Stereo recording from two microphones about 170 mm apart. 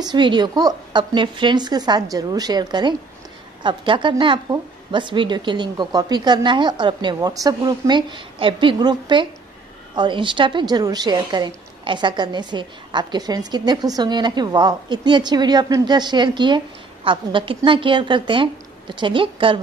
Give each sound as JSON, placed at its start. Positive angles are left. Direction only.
{"t": 0.0, "sound": "a woman's voice", "side_deg": -25}